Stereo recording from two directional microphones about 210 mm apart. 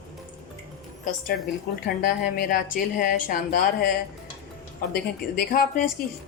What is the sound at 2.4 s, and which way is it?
A woman's voice, 40° left (ahead or behind).